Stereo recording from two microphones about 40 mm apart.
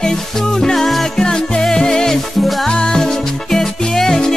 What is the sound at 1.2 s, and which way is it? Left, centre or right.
Music, centre.